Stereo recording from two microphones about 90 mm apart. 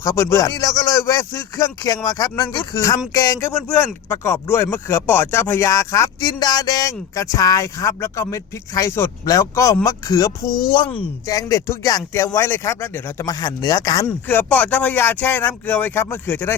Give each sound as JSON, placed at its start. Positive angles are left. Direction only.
{"t": 0.0, "sound": "speech", "side_deg": 30}
{"t": 0.4, "sound": "a man's voice", "side_deg": 45}
{"t": 3.5, "sound": "speech", "side_deg": 20}
{"t": 6.1, "sound": "speech", "side_deg": 50}
{"t": 10.7, "sound": "speech", "side_deg": 75}
{"t": 11.3, "sound": "speech", "side_deg": 40}
{"t": 13.2, "sound": "speech", "side_deg": 45}
{"t": 14.3, "sound": "speech", "side_deg": 15}